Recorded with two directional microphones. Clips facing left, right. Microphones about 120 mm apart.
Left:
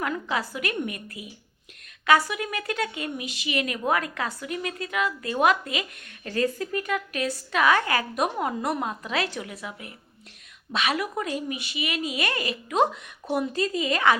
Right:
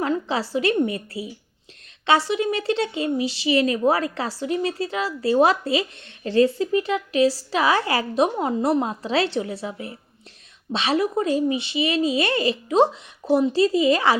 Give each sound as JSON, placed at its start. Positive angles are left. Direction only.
{"t": 0.0, "sound": "a woman's voice", "side_deg": -30}